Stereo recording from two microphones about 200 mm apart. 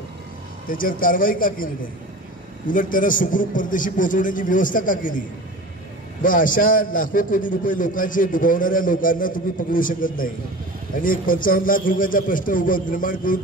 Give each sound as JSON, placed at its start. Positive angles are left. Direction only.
{"t": 0.7, "sound": "a man's voice", "side_deg": 45}
{"t": 2.7, "sound": "a man's voice", "side_deg": 40}
{"t": 6.2, "sound": "a man's voice", "side_deg": 40}